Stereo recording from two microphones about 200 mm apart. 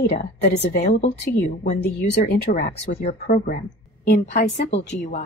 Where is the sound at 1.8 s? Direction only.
55° left (ahead or behind).